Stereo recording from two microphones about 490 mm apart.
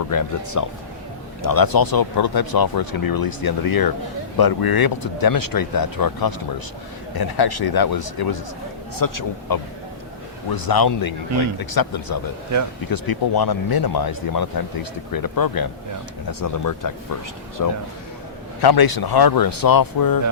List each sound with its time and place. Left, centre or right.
0.1 s speech: left